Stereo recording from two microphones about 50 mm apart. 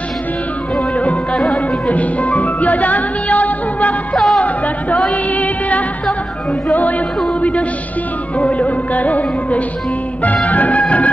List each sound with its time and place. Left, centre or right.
1.3 s music: centre
1.9 s music: left
8.4 s music: left